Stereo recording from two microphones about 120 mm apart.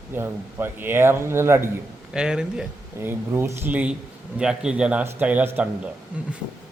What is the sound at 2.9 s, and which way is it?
Speech, 20° right (ahead or behind).